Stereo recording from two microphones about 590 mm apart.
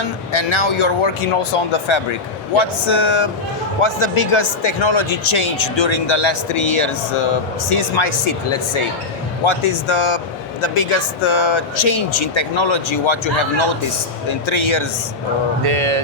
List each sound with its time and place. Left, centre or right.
0.3 s speech: left
14.3 s speech: left
15.6 s music: right